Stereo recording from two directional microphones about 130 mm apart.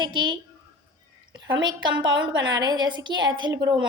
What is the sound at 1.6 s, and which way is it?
A woman's voice, 35° right (ahead or behind).